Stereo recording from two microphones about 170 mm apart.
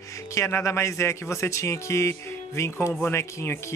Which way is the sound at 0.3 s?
15° left (ahead or behind).